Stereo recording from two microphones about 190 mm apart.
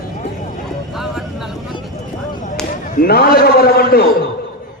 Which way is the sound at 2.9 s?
55° left (ahead or behind).